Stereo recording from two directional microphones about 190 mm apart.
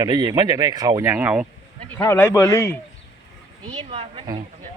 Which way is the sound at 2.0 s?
15° left (ahead or behind).